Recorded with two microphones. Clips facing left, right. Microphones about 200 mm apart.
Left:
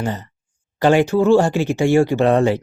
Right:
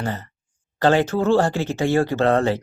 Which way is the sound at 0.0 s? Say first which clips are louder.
Left 3 dB; 15° left (ahead or behind).